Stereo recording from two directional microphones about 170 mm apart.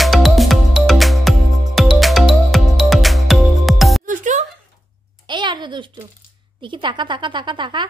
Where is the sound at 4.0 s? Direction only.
50° right (ahead or behind).